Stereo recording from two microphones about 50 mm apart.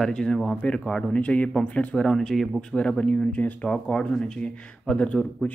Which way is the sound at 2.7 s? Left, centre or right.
Left.